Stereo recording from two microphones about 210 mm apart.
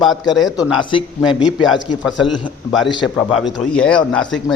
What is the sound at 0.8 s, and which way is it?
Speech, 25° left (ahead or behind).